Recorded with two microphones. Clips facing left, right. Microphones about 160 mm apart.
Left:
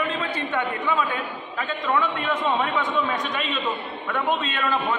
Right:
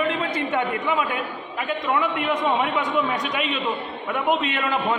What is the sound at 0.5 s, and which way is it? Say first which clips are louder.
A man's voice: even; 15° right (ahead or behind).